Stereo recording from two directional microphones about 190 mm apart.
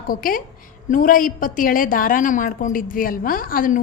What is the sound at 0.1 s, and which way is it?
A woman's voice, 45° left (ahead or behind).